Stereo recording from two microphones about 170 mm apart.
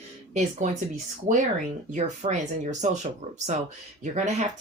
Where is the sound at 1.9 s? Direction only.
45° right (ahead or behind).